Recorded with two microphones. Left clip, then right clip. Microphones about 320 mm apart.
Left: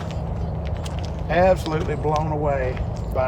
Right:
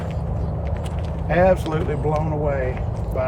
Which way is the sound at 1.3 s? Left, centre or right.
Centre.